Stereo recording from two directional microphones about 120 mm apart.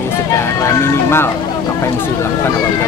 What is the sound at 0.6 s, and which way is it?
Speech, 20° left (ahead or behind).